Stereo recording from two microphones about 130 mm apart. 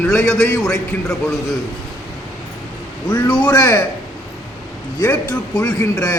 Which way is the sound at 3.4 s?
25° left (ahead or behind).